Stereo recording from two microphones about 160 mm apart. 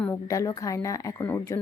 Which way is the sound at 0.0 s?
20° left (ahead or behind).